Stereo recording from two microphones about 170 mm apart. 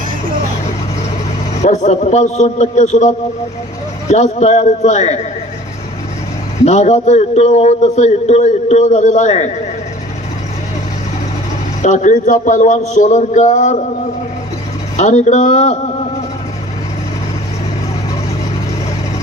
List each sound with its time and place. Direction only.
1.6 s a man's voice: 45° left (ahead or behind)
6.6 s a man's voice: 40° left (ahead or behind)
11.8 s a man's voice: 45° left (ahead or behind)
15.0 s a man's voice: 45° left (ahead or behind)